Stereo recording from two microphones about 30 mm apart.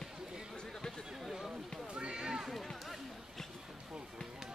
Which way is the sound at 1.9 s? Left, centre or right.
Right.